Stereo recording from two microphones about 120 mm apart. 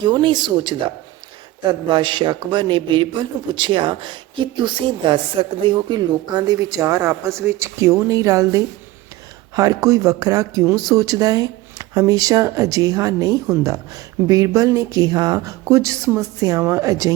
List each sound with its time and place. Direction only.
0.0 s a man's voice: 40° right (ahead or behind)